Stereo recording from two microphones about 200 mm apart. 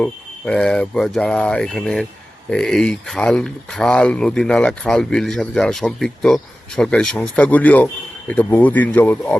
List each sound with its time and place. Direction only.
0.0 s speech: 5° left (ahead or behind)